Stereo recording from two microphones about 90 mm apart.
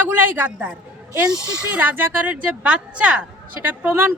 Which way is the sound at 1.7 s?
20° right (ahead or behind).